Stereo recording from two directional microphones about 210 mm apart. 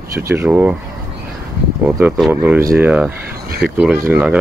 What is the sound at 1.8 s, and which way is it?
Speech, 5° right (ahead or behind).